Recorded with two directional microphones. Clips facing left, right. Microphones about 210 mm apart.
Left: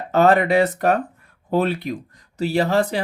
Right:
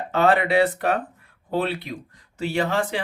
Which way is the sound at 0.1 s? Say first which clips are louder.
Left 4 dB; 40° left (ahead or behind).